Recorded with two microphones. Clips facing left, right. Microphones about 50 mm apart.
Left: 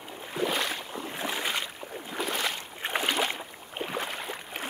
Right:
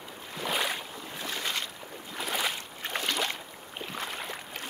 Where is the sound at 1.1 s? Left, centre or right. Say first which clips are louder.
Left 2 dB; centre.